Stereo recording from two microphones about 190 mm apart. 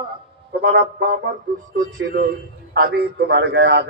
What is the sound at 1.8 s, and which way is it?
A man's voice, 45° right (ahead or behind).